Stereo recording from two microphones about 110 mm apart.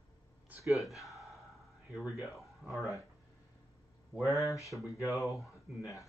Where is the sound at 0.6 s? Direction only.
Centre (ahead or behind).